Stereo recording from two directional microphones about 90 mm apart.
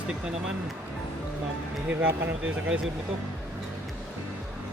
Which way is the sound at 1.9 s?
25° right (ahead or behind).